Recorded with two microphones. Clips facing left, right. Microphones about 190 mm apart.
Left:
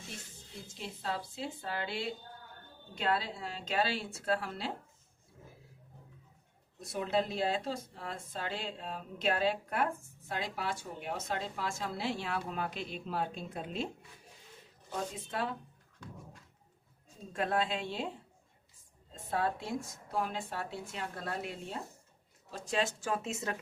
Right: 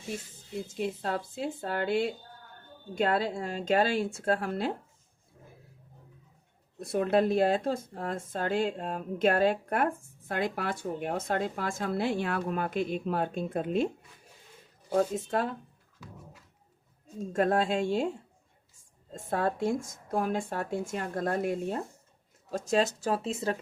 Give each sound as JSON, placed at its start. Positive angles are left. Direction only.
{"t": 0.7, "sound": "speech", "side_deg": -50}
{"t": 6.7, "sound": "speech", "side_deg": -60}
{"t": 14.9, "sound": "speech", "side_deg": -45}
{"t": 17.2, "sound": "speech", "side_deg": -45}
{"t": 19.1, "sound": "speech", "side_deg": -45}